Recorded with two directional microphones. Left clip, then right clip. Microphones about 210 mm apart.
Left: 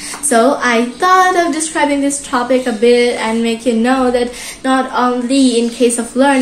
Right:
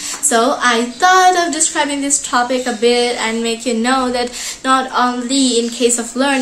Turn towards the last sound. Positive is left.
turn(degrees=-20)  # may be behind; listen again after turning